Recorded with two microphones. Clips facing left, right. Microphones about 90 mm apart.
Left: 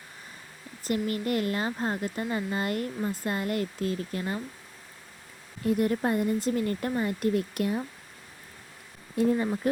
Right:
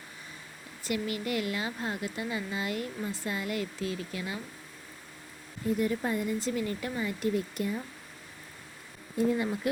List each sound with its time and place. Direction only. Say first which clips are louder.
0.9 s speech: left 4 dB; 40° left (ahead or behind)
5.6 s speech: left 4 dB; 55° left (ahead or behind)
9.2 s speech: left 3 dB; 60° left (ahead or behind)